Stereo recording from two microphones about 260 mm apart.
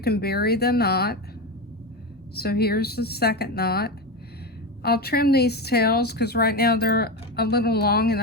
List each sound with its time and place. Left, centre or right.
0.0 s a woman's voice: left
2.3 s a woman's voice: left